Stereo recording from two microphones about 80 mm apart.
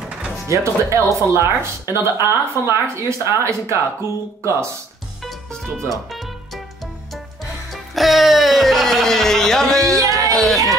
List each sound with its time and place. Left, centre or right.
0.5 s speech: right
5.2 s music: centre
7.7 s music: centre
10.0 s a sound: right
10.3 s speech: centre